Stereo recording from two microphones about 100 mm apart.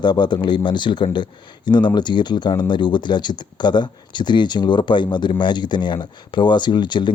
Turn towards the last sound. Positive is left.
turn(degrees=50)  # may be behind; listen again after turning